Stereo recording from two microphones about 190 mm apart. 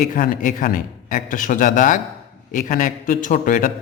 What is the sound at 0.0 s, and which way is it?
A man's voice, 45° left (ahead or behind).